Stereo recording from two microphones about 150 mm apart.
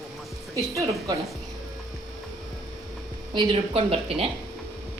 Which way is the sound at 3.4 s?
40° right (ahead or behind).